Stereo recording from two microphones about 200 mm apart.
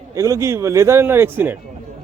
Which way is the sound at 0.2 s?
15° right (ahead or behind).